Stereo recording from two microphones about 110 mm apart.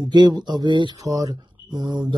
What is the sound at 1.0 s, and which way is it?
Speech, 35° right (ahead or behind).